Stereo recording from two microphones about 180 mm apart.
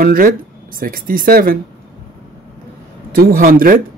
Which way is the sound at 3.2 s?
55° right (ahead or behind).